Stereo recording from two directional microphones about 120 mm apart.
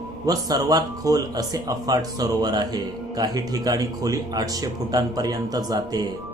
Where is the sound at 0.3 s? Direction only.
30° right (ahead or behind).